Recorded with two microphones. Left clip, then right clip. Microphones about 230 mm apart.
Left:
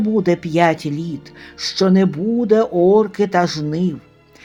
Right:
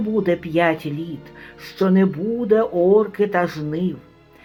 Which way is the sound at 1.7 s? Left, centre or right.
Left.